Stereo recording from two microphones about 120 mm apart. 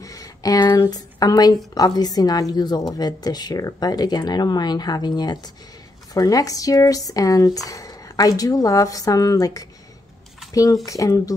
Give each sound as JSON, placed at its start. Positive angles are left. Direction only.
{"t": 0.0, "sound": "a woman's voice", "side_deg": 30}